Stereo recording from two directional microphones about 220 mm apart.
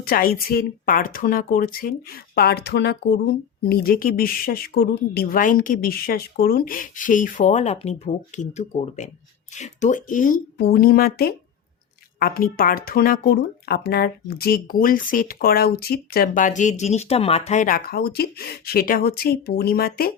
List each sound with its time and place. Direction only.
0.0 s speech: 40° left (ahead or behind)